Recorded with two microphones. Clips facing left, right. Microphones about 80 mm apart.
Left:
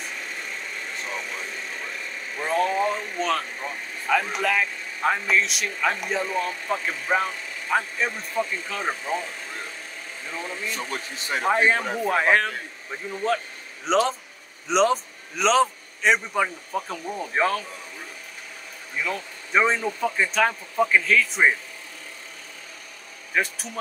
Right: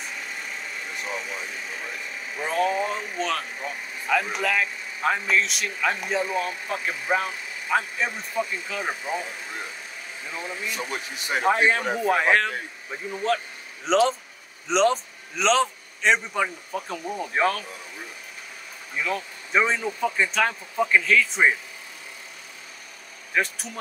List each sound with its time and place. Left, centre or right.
0.0 s vehicle: centre
2.3 s speech: centre
10.2 s speech: centre
11.4 s speech: centre
19.0 s speech: centre
23.3 s speech: centre